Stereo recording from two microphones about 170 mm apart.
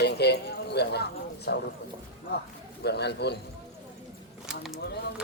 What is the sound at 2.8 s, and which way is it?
Speech, 75° left (ahead or behind).